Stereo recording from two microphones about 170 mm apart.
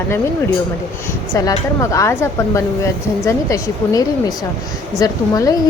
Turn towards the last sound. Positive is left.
turn(degrees=20)  # may be behind; listen again after turning